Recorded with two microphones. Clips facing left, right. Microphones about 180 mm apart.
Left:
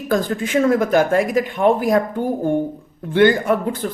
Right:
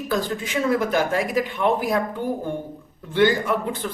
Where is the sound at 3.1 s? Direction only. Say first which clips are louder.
Left 5 dB; 55° left (ahead or behind).